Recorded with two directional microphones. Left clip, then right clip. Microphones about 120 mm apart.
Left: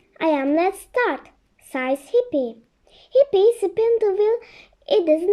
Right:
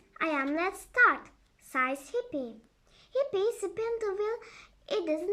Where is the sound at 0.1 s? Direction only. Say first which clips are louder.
Left 11 dB; 50° left (ahead or behind).